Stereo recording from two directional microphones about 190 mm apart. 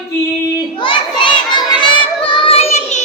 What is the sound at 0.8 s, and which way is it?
Child singing, 25° left (ahead or behind).